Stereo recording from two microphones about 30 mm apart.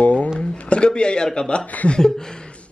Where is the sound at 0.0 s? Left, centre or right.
Left.